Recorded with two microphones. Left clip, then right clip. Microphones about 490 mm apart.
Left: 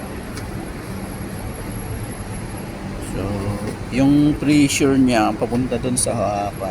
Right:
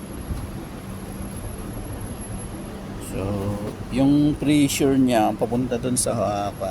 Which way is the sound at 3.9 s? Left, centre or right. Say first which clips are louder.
Left 3 dB; right.